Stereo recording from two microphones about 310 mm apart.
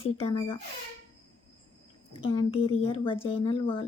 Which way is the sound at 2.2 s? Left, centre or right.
Centre.